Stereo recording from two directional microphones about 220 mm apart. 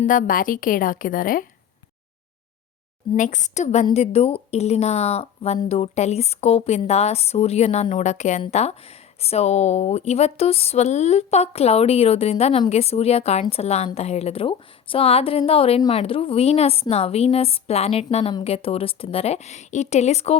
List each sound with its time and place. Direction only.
0.0 s a woman's voice: 35° left (ahead or behind)
3.2 s a woman's voice: 35° left (ahead or behind)